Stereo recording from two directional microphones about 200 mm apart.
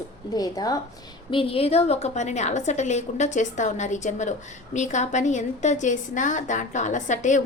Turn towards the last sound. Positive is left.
turn(degrees=35)  # may be behind; listen again after turning